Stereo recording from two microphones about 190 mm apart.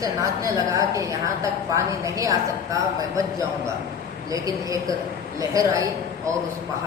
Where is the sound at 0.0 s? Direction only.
15° right (ahead or behind).